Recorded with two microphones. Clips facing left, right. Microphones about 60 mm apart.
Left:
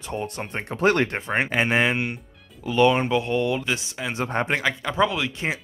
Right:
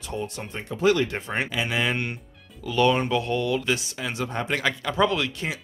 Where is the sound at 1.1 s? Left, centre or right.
Left.